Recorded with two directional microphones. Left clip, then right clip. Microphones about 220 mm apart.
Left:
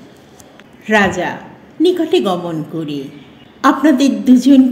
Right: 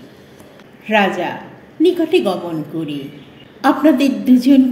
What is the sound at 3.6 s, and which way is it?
Speech, 35° left (ahead or behind).